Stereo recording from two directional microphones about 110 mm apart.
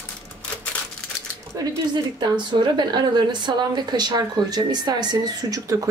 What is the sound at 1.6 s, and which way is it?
A woman's voice, 40° right (ahead or behind).